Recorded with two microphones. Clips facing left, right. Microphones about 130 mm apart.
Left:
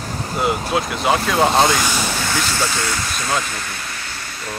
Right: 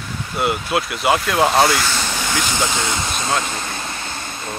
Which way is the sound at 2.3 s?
15° right (ahead or behind).